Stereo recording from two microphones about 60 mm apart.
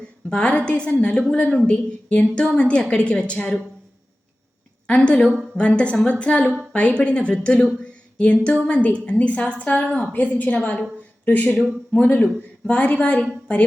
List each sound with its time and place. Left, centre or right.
0.3 s a woman's voice: centre
4.9 s a woman's voice: centre
7.8 s music: centre
8.6 s a woman's voice: centre
11.5 s speech: centre
11.9 s a woman's voice: left